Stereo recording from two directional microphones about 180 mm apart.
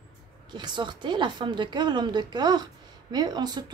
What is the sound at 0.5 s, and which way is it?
A woman's voice, 25° right (ahead or behind).